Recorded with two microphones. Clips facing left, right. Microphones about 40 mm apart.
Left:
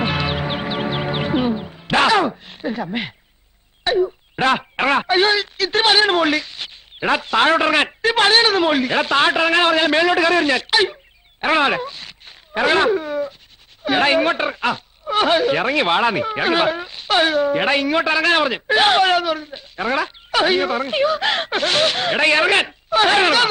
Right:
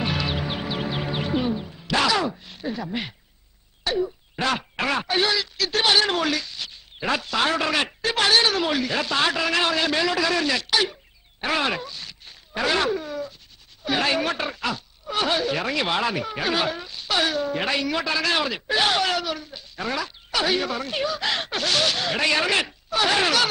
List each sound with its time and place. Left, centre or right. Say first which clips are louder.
0.0 s music: left 5 dB; left
3.8 s speech: left 7 dB; left